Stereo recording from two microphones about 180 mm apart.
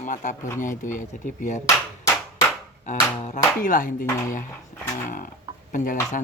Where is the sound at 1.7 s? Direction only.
20° left (ahead or behind).